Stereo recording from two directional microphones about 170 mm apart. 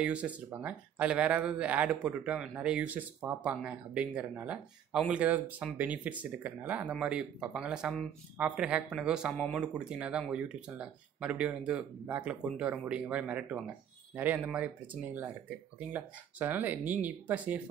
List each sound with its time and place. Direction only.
0.0 s speech: 5° right (ahead or behind)
16.8 s speech: 45° right (ahead or behind)